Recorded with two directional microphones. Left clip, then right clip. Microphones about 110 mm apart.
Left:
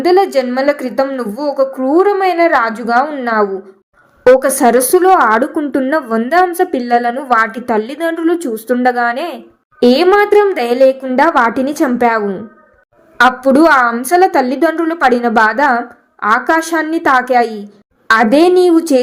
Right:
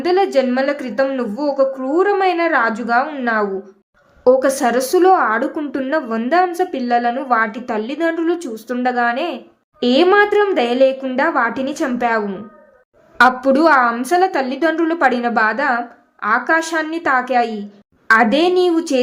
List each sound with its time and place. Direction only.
0.0 s a woman's voice: 35° left (ahead or behind)